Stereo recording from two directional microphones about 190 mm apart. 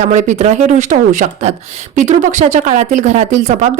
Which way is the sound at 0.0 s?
40° right (ahead or behind).